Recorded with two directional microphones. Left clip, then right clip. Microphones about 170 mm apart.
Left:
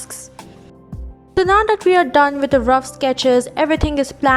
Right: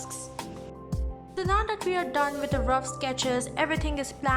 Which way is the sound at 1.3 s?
45° left (ahead or behind).